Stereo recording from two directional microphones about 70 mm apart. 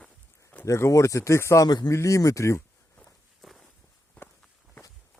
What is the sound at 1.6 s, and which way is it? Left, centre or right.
Speech, left.